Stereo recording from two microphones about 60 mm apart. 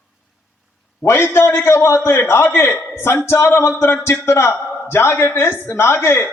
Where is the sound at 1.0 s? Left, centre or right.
Left.